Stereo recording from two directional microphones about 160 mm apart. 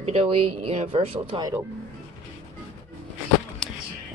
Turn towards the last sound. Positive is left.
turn(degrees=0)  # may be behind; listen again after turning